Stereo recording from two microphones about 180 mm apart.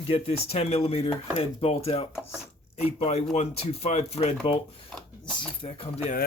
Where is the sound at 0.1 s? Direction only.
35° left (ahead or behind).